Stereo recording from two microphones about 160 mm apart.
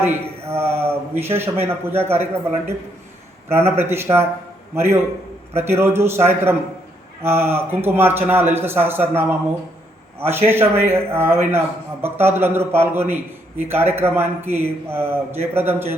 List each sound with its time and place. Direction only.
0.0 s a man's voice: 15° right (ahead or behind)
3.5 s a man's voice: 15° right (ahead or behind)